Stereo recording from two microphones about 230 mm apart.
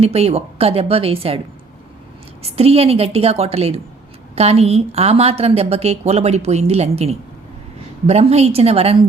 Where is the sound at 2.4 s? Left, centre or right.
Right.